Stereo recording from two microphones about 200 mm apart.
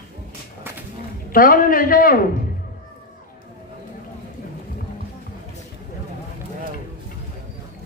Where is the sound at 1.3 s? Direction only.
45° left (ahead or behind).